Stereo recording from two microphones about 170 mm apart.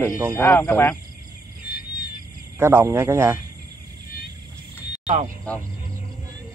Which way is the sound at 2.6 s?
15° right (ahead or behind).